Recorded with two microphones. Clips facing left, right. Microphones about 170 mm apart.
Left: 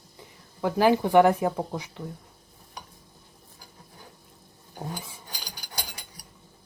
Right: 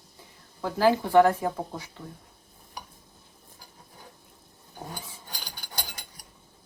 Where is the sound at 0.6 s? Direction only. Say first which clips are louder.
Left 2 dB; 15° left (ahead or behind).